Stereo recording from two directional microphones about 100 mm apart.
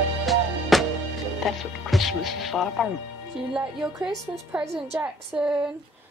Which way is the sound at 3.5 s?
10° right (ahead or behind).